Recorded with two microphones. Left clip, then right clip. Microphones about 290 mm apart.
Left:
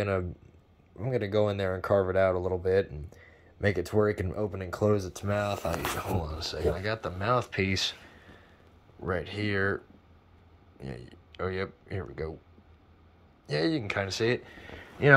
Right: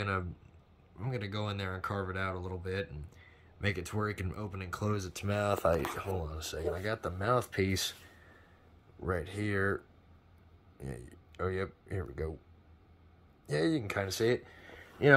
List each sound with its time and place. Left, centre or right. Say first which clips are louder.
0.9 s speech: left 12 dB; centre
5.1 s speech: left 2 dB; centre
9.0 s speech: left 4 dB; centre
10.8 s speech: left 3 dB; centre
13.5 s speech: left 3 dB; centre